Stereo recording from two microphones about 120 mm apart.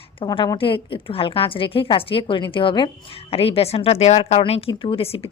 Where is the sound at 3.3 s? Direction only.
55° left (ahead or behind).